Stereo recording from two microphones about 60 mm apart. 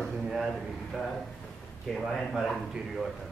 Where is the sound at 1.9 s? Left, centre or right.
Centre.